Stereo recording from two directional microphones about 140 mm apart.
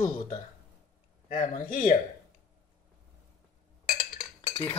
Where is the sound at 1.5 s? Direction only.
75° left (ahead or behind).